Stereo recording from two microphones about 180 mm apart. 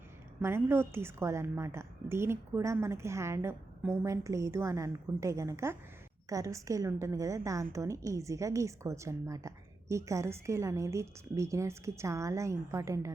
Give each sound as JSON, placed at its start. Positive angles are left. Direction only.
{"t": 0.4, "sound": "a woman's voice", "side_deg": -15}